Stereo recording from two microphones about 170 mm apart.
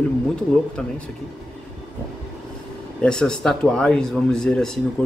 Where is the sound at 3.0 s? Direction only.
5° left (ahead or behind).